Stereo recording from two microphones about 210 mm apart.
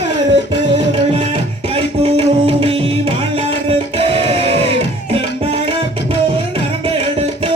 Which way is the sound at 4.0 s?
25° right (ahead or behind).